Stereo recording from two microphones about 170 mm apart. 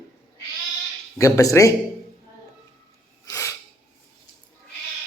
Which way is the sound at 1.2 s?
20° left (ahead or behind).